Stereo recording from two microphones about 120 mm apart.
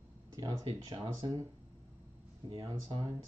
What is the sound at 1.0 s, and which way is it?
Speech, 30° right (ahead or behind).